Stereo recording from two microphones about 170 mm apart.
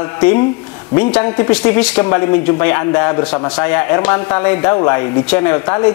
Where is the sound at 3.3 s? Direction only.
25° left (ahead or behind).